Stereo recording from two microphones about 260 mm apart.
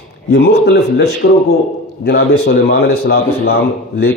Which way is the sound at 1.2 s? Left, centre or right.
Left.